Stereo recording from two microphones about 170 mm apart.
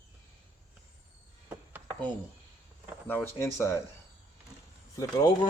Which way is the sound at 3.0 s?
15° left (ahead or behind).